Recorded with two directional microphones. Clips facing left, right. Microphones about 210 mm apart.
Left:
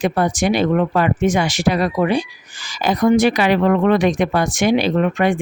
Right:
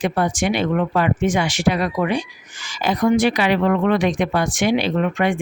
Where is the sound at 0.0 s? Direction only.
40° left (ahead or behind).